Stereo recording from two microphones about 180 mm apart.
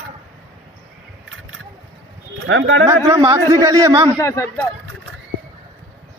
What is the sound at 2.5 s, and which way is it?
Speech, 90° right.